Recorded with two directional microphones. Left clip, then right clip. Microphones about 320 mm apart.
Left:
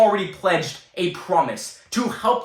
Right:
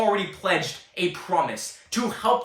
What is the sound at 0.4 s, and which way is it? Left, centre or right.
Speech, centre.